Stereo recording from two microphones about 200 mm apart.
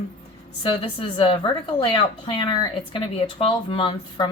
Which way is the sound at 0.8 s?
25° left (ahead or behind).